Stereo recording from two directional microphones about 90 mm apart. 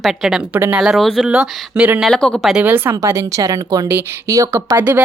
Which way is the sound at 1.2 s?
10° right (ahead or behind).